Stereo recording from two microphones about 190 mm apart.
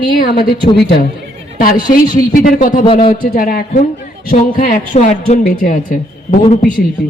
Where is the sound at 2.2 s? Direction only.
45° left (ahead or behind).